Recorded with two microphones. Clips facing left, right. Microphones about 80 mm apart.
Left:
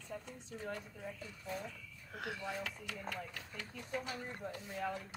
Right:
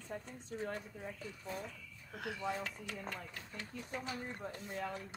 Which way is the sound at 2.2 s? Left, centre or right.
Centre.